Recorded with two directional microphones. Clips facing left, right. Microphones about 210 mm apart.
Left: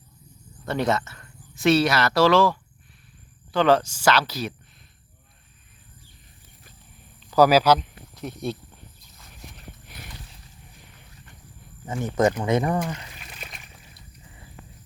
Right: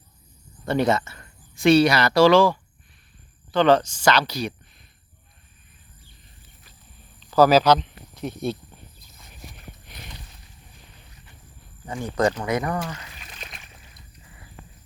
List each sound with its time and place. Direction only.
0.6 s speech: centre (ahead or behind)
7.3 s speech: 10° left (ahead or behind)
9.5 s horse: 5° left (ahead or behind)
12.0 s speech: 20° left (ahead or behind)
12.9 s a sound: 10° left (ahead or behind)